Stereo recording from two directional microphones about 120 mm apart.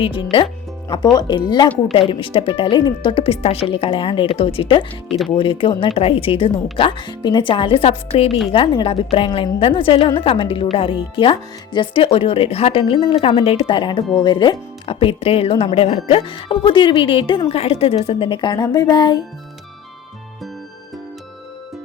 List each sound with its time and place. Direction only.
0.0 s speech: 50° left (ahead or behind)